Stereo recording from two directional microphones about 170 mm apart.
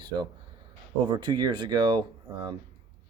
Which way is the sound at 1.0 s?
25° right (ahead or behind).